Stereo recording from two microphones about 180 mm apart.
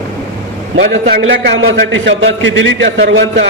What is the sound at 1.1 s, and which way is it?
A man's voice, 65° right (ahead or behind).